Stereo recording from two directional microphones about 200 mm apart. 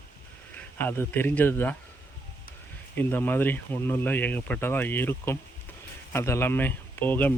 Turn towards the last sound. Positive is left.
turn(degrees=10)  # may be behind; listen again after turning